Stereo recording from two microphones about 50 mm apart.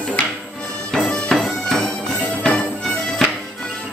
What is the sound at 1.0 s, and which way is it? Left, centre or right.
Music, left.